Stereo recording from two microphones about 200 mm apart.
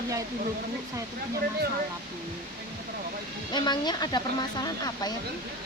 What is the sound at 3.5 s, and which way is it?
Speech, 20° left (ahead or behind).